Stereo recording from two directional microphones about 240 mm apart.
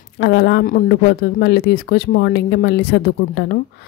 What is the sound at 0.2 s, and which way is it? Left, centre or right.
Speech, left.